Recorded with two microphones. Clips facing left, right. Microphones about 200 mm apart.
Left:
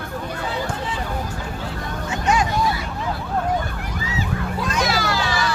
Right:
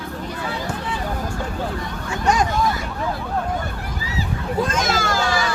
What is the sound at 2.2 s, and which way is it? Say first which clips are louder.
Vehicle: right 1 dB; 40° right (ahead or behind).